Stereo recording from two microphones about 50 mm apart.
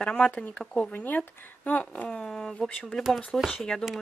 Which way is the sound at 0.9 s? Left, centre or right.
Left.